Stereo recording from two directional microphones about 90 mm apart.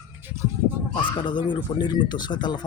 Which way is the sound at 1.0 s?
65° left (ahead or behind).